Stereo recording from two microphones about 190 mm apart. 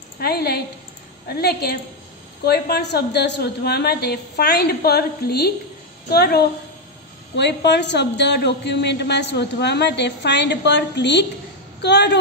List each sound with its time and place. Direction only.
0.2 s a woman's voice: 55° left (ahead or behind)